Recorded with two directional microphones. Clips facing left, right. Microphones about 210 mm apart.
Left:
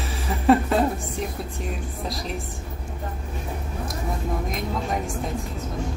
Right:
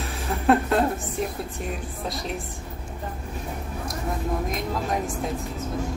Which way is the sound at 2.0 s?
Centre (ahead or behind).